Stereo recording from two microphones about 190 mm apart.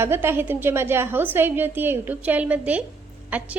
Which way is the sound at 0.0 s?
10° right (ahead or behind).